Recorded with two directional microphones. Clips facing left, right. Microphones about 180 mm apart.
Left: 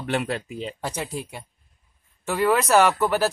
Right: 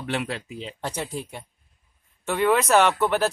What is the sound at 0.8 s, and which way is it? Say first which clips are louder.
Speech: right 3 dB; 5° left (ahead or behind).